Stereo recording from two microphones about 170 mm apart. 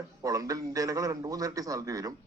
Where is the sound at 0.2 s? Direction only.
20° right (ahead or behind).